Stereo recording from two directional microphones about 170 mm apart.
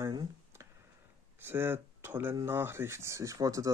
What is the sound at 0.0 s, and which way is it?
Clicking, 20° right (ahead or behind).